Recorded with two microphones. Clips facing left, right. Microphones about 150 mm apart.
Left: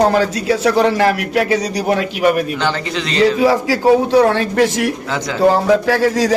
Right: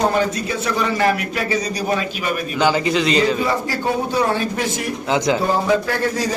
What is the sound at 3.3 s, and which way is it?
A man's voice, 90° left.